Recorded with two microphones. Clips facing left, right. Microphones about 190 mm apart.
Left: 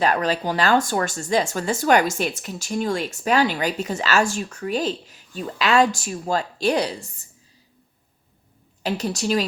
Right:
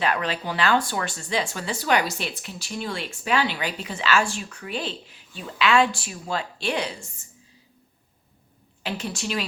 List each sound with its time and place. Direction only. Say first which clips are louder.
0.0 s speech: left 5 dB; 40° left (ahead or behind)
8.8 s a woman's voice: left 6 dB; 40° left (ahead or behind)